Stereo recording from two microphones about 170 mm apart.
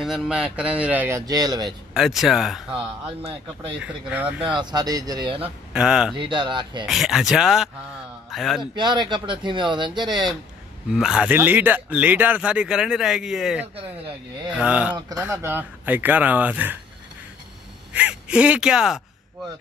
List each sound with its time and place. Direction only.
0.0 s speech: centre (ahead or behind); by 1.7 s 20° right (ahead or behind)
2.0 s speech: centre (ahead or behind)
3.8 s speech: 10° right (ahead or behind)
4.5 s speech: 25° right (ahead or behind)
5.7 s speech: 5° right (ahead or behind)
6.1 s speech: 30° right (ahead or behind)
6.9 s speech: centre (ahead or behind)
8.7 s speech: 25° right (ahead or behind)
10.9 s speech: 5° right (ahead or behind)
17.9 s speech: 5° right (ahead or behind)